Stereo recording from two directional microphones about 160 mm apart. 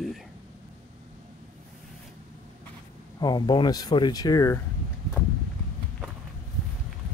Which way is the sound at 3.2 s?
25° left (ahead or behind).